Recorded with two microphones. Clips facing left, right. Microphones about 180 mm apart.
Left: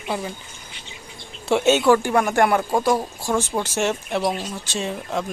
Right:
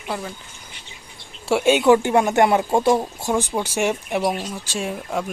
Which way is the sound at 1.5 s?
10° right (ahead or behind).